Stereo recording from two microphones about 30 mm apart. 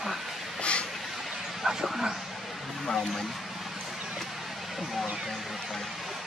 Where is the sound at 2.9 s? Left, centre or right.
Centre.